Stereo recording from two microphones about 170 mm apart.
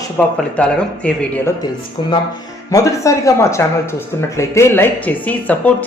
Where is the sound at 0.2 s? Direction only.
10° left (ahead or behind).